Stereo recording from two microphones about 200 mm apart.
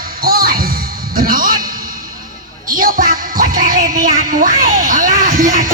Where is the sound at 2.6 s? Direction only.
45° right (ahead or behind).